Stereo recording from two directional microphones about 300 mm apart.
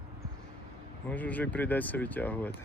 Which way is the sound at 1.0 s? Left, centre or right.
Centre.